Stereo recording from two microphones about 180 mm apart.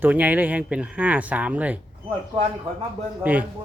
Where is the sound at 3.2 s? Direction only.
10° right (ahead or behind).